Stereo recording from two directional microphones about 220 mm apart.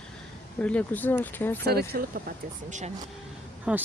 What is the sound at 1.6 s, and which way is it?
Speech, 45° right (ahead or behind).